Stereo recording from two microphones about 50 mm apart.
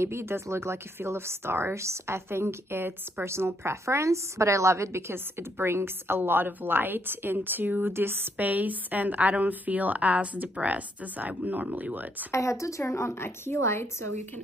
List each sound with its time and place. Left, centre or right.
0.0 s speech: right
7.8 s a woman's voice: right
12.3 s speech: left